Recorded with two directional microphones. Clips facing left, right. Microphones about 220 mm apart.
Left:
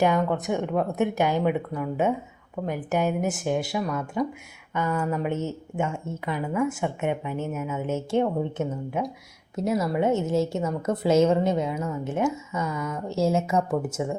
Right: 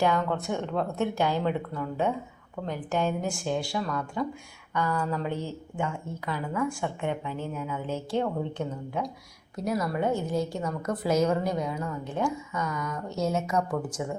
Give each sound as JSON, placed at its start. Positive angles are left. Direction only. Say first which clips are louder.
{"t": 0.0, "sound": "a woman's voice", "louder": "left 3 dB", "side_deg": 15}